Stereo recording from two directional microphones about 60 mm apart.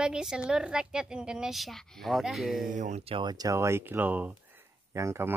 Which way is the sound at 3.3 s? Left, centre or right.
Right.